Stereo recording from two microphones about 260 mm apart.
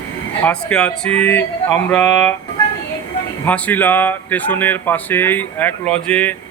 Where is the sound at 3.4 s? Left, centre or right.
Centre.